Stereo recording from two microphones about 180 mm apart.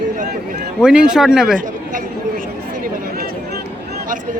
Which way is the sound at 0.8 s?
5° right (ahead or behind).